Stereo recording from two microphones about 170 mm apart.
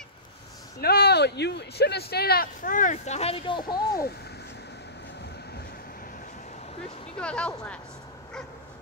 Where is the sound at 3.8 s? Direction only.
65° left (ahead or behind); by 7.1 s 35° left (ahead or behind).